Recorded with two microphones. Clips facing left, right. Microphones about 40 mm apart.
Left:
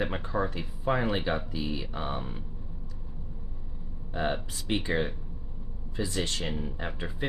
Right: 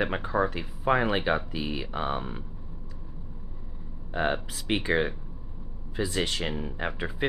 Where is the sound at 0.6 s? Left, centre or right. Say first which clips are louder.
Right 4 dB; right.